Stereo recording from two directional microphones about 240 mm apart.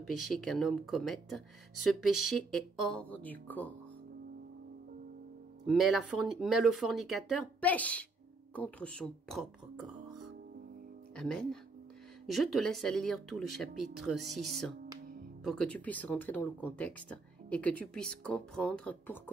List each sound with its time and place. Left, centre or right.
0.0 s speech: centre
5.7 s speech: centre